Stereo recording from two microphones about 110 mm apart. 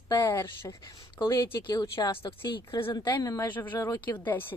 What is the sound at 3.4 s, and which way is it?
Speech, 15° left (ahead or behind).